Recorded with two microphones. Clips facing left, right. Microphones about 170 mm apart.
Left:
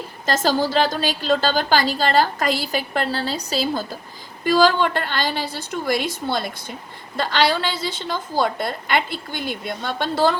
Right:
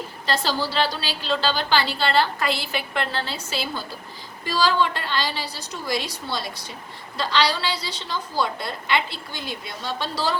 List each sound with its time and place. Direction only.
0.3 s a woman's voice: 45° left (ahead or behind)
4.4 s a woman's voice: 50° left (ahead or behind)